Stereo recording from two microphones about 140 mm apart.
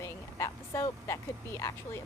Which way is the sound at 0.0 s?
20° left (ahead or behind).